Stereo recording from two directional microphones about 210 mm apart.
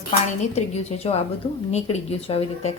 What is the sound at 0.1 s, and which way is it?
A woman's voice, 30° left (ahead or behind).